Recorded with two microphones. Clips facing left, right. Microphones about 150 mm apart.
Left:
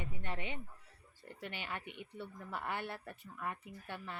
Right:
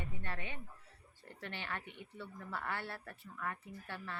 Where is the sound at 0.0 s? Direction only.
20° left (ahead or behind).